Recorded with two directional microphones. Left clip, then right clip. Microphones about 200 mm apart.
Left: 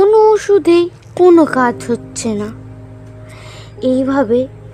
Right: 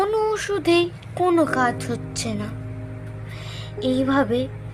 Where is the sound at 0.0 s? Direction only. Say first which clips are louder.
Left 13 dB; 40° left (ahead or behind).